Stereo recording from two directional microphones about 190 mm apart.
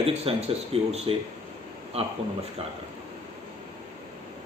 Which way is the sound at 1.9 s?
30° right (ahead or behind).